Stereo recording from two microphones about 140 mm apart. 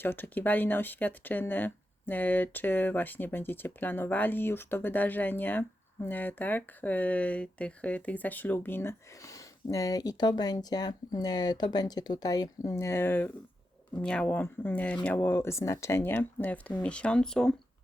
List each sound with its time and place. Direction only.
0.0 s speech: 15° left (ahead or behind)